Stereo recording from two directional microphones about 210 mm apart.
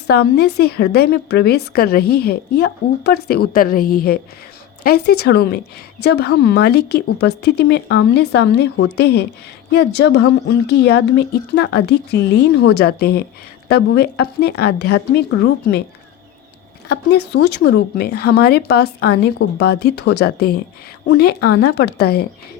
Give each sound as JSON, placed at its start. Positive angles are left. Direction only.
{"t": 0.1, "sound": "a woman's voice", "side_deg": 50}
{"t": 16.9, "sound": "a woman's voice", "side_deg": 55}